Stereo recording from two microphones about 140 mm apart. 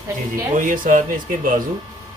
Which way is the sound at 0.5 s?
70° right (ahead or behind).